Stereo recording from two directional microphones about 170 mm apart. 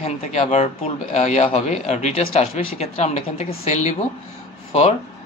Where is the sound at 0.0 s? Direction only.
40° left (ahead or behind).